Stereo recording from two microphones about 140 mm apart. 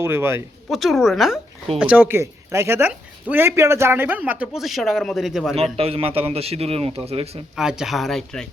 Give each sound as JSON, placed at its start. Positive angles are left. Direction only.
{"t": 0.0, "sound": "speech", "side_deg": -15}
{"t": 0.7, "sound": "speech", "side_deg": 0}
{"t": 5.7, "sound": "a man's voice", "side_deg": -45}
{"t": 7.5, "sound": "speech", "side_deg": -5}